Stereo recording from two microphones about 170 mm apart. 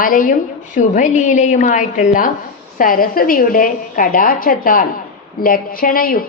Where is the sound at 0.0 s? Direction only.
55° left (ahead or behind).